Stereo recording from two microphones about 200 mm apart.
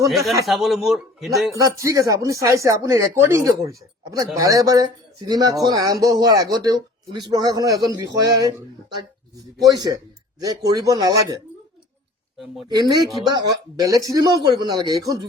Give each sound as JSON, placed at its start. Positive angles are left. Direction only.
{"t": 0.4, "sound": "speech", "side_deg": 0}
{"t": 1.5, "sound": "speech", "side_deg": -15}
{"t": 9.6, "sound": "speech", "side_deg": -20}
{"t": 12.6, "sound": "speech", "side_deg": -20}